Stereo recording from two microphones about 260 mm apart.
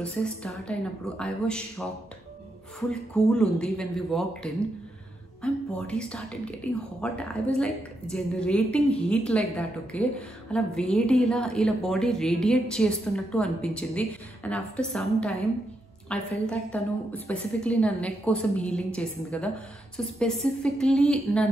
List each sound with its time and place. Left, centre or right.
0.0 s a woman's voice: centre
2.9 s a woman's voice: centre